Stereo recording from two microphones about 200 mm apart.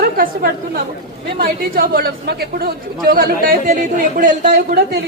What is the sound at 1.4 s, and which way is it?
A man's voice, 45° right (ahead or behind).